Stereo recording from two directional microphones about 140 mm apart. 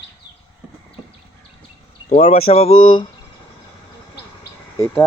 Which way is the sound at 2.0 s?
55° left (ahead or behind).